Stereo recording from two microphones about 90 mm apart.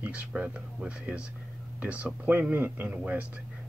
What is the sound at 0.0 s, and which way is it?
Speech, 15° right (ahead or behind).